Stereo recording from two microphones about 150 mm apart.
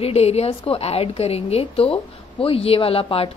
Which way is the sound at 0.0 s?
45° left (ahead or behind).